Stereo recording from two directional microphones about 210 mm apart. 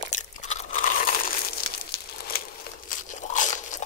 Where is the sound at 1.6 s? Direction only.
90° left.